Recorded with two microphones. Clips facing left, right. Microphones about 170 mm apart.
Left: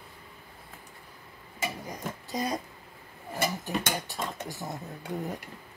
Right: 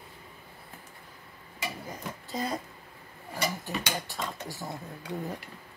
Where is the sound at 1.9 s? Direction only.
15° left (ahead or behind).